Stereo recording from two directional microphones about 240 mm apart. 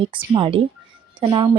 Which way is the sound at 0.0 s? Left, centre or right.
Right.